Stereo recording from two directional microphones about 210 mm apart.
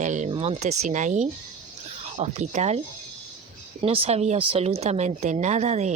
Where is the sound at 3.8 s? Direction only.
30° right (ahead or behind).